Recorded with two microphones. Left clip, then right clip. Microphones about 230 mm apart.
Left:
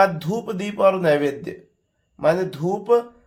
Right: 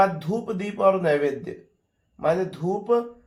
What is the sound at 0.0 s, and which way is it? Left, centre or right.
A man's voice, left.